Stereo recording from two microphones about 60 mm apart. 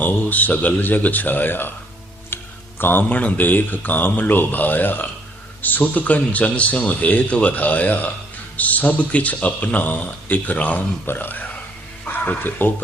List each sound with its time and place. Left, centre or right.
0.0 s speech: left
11.0 s speech: left